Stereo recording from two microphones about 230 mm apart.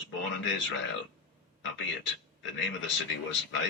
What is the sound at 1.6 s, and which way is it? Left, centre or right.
A man's voice, left.